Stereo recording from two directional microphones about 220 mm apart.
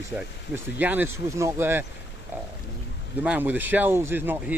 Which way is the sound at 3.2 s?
5° right (ahead or behind).